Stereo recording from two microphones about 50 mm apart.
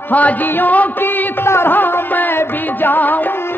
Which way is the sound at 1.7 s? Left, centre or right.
Left.